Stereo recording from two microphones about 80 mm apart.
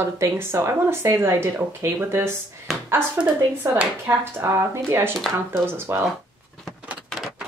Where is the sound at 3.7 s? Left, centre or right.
Right.